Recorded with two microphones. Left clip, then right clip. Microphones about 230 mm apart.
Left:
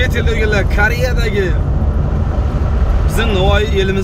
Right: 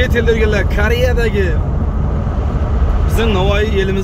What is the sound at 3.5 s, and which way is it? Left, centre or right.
Speech, centre.